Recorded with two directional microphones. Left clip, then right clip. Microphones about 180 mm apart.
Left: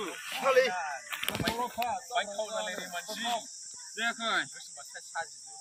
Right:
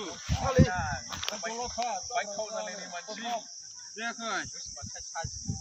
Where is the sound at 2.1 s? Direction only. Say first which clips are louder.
Even; centre (ahead or behind).